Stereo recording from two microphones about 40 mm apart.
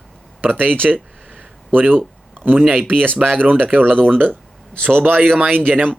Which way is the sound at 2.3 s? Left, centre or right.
Right.